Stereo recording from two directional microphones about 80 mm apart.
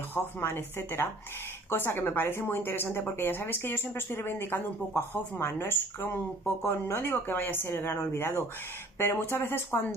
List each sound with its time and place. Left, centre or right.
0.1 s a woman's voice: left